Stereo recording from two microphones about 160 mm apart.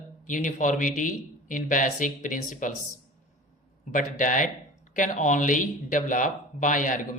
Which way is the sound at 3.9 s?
55° left (ahead or behind).